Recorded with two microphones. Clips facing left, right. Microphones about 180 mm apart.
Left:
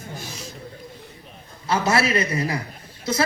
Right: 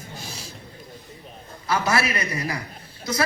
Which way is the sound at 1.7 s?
25° left (ahead or behind).